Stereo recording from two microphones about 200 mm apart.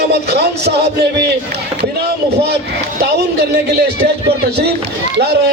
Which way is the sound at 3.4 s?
55° right (ahead or behind).